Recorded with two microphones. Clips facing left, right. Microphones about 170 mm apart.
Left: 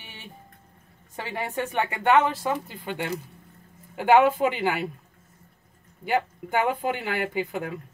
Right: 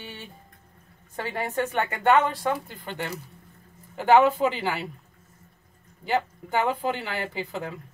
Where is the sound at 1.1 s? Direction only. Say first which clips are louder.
Right 2 dB; 10° left (ahead or behind).